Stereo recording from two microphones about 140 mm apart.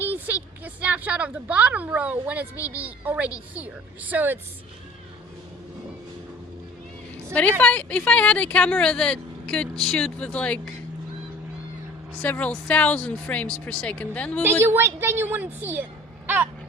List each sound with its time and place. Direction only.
0.0 s a woman's voice: 15° right (ahead or behind)
7.6 s speech: 10° left (ahead or behind)
12.2 s speech: 10° left (ahead or behind)
14.6 s a woman's voice: 15° right (ahead or behind)
16.2 s a sound: 15° right (ahead or behind)